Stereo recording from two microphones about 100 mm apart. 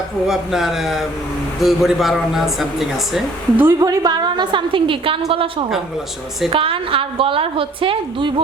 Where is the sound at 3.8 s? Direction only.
40° right (ahead or behind); by 8.3 s 60° right (ahead or behind).